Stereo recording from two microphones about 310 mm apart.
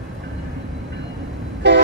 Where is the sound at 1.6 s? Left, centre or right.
Right.